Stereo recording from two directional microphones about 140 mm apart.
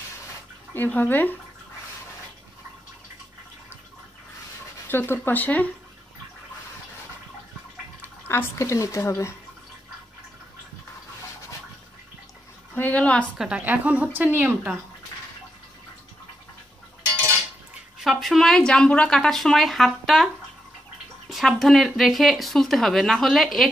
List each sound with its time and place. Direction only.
0.7 s speech: 15° left (ahead or behind)
4.8 s speech: 15° left (ahead or behind)
8.0 s speech: 15° left (ahead or behind)
12.7 s speech: 10° left (ahead or behind)
13.4 s a woman's voice: 10° right (ahead or behind)
18.0 s speech: centre (ahead or behind)
21.3 s speech: centre (ahead or behind)